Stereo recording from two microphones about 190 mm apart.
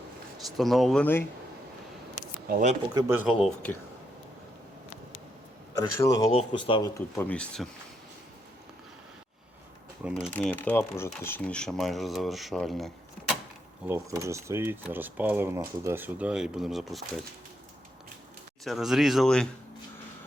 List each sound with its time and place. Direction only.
0.5 s speech: centre (ahead or behind)
2.5 s speech: 45° right (ahead or behind)
2.9 s speech: 15° right (ahead or behind)
5.7 s speech: 20° left (ahead or behind)
10.3 s speech: 10° left (ahead or behind)
13.8 s speech: 15° right (ahead or behind)
18.6 s speech: centre (ahead or behind)